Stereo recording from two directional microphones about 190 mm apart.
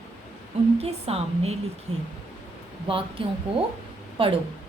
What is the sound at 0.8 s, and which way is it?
Speech, 35° right (ahead or behind).